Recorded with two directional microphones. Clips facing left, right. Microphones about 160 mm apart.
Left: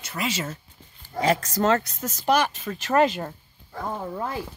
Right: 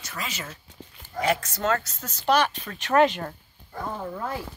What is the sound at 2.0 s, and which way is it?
Speech, 10° left (ahead or behind).